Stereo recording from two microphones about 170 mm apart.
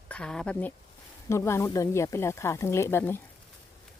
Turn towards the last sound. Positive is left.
turn(degrees=15)  # may be behind; listen again after turning